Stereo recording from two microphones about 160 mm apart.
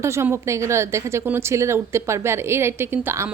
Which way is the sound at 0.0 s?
15° right (ahead or behind).